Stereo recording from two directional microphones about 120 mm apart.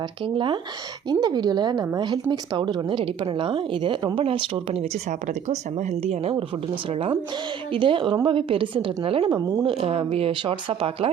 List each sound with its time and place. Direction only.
0.3 s a woman's voice: 40° right (ahead or behind)
7.7 s a woman's voice: 45° right (ahead or behind)